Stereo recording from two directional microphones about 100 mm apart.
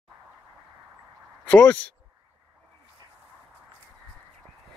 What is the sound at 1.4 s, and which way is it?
Speech, 10° left (ahead or behind).